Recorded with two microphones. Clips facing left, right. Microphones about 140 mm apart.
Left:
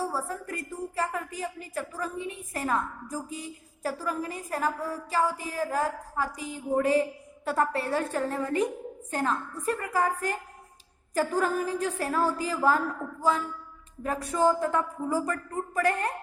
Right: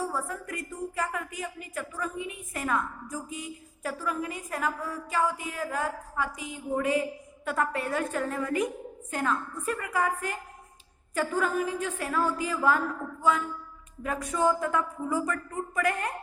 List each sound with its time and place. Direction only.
0.0 s a woman's voice: 35° left (ahead or behind)
14.0 s a woman's voice: 35° left (ahead or behind)